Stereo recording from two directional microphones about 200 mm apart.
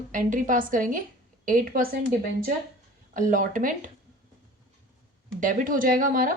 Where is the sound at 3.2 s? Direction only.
45° right (ahead or behind).